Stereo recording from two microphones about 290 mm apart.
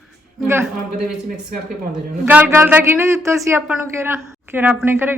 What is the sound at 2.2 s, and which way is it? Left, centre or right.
Speech, centre.